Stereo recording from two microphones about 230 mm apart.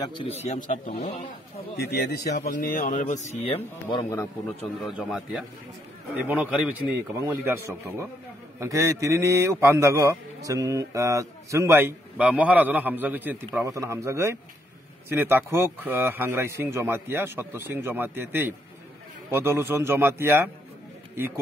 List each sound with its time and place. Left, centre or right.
0.0 s speech: left
1.8 s speech: left
4.8 s a man's voice: centre